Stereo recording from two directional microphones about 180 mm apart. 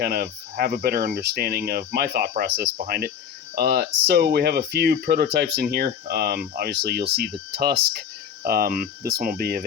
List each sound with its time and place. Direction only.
0.0 s speech: 60° right (ahead or behind)